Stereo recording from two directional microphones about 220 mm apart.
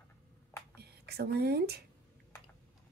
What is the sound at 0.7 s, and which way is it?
Whispering, 45° right (ahead or behind).